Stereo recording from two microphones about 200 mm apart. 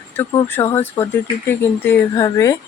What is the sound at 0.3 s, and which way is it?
Speech, 10° left (ahead or behind).